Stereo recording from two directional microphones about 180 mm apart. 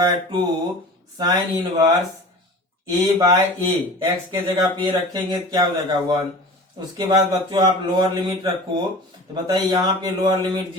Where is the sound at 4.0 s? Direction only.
25° right (ahead or behind).